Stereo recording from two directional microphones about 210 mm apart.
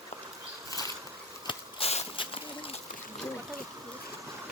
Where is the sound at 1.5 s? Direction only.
30° left (ahead or behind).